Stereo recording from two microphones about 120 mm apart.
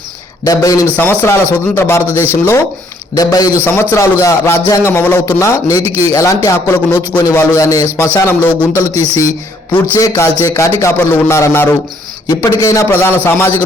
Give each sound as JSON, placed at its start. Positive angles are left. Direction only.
{"t": 0.4, "sound": "speech", "side_deg": 30}
{"t": 3.6, "sound": "speech", "side_deg": 20}
{"t": 8.9, "sound": "speech", "side_deg": -60}
{"t": 9.7, "sound": "speech", "side_deg": 20}